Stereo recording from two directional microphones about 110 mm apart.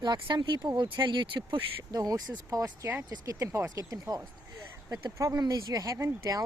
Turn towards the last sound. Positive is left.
turn(degrees=-30)  # may be behind; listen again after turning